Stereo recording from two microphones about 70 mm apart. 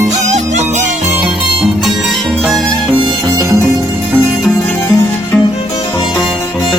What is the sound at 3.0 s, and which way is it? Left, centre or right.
Music, right.